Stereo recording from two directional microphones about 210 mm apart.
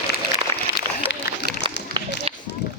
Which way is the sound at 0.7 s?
60° left (ahead or behind).